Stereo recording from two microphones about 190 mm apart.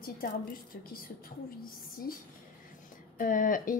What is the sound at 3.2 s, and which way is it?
Speech, 45° left (ahead or behind).